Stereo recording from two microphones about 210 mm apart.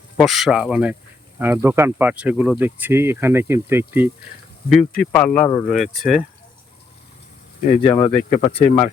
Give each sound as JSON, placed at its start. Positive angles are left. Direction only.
{"t": 0.2, "sound": "speech", "side_deg": 0}
{"t": 4.9, "sound": "speech", "side_deg": 5}
{"t": 7.8, "sound": "speech", "side_deg": 30}